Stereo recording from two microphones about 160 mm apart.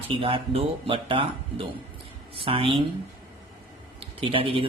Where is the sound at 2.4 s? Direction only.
35° right (ahead or behind).